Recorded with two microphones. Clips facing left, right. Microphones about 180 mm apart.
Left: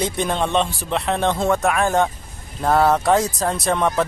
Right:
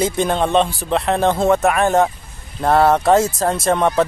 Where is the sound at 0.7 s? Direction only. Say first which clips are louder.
Right 4 dB; centre (ahead or behind).